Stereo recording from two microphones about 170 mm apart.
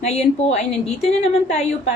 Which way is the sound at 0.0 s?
40° left (ahead or behind).